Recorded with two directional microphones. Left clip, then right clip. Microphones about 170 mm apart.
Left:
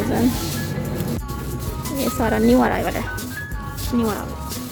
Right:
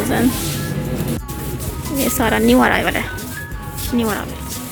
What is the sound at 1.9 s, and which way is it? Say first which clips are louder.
Speech: right 4 dB; centre (ahead or behind).